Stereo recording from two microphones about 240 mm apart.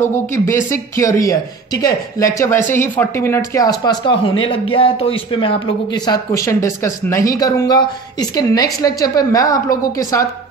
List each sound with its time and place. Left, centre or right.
0.0 s speech: centre